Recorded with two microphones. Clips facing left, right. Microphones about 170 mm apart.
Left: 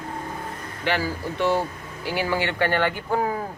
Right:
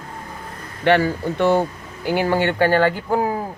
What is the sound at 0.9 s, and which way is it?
Speech, 60° right (ahead or behind).